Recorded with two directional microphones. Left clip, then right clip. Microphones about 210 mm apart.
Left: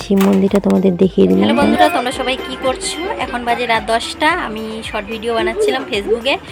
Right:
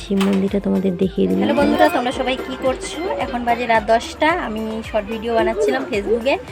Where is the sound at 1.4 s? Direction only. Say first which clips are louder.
Even; 10° right (ahead or behind).